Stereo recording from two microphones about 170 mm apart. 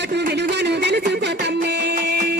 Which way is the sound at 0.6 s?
80° right.